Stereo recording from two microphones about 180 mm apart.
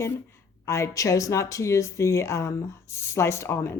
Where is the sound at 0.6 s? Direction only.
15° left (ahead or behind).